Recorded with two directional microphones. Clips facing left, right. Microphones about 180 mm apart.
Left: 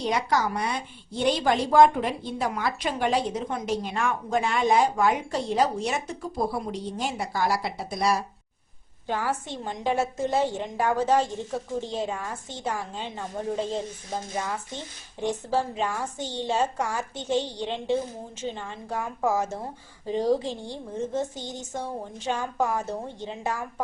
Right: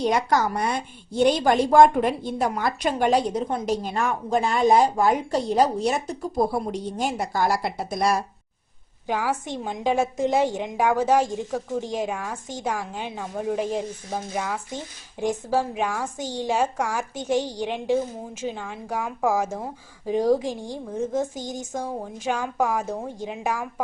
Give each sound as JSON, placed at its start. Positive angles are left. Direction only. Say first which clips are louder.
{"t": 0.0, "sound": "a woman's voice", "louder": "right 3 dB", "side_deg": -50}
{"t": 6.7, "sound": "a woman's voice", "louder": "right 4 dB", "side_deg": -50}
{"t": 9.0, "sound": "a woman's voice", "louder": "right 3 dB", "side_deg": -10}